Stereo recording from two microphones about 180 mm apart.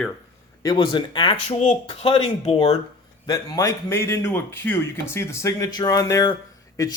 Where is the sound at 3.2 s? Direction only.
20° left (ahead or behind).